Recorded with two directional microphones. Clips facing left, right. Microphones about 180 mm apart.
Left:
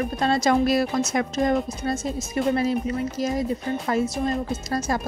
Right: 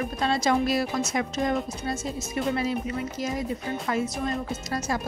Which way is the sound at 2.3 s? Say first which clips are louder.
Left 5 dB; 40° left (ahead or behind).